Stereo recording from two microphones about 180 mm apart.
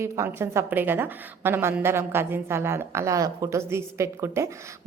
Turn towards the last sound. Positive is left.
turn(degrees=-15)  # may be behind; listen again after turning